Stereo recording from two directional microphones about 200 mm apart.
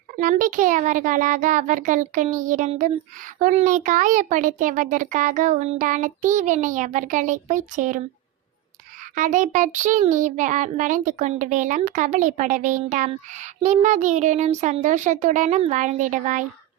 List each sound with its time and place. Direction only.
0.2 s a child's voice: 40° right (ahead or behind)
9.1 s a child's voice: 40° right (ahead or behind)